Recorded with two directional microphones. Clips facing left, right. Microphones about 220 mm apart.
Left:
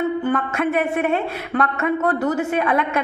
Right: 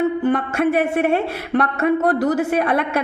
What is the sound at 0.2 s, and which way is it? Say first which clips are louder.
Speech: right 3 dB; 35° right (ahead or behind).